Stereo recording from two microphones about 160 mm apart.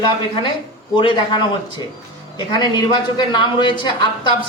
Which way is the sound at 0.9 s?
30° left (ahead or behind).